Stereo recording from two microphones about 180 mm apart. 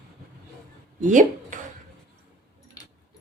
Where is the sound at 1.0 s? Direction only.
45° right (ahead or behind).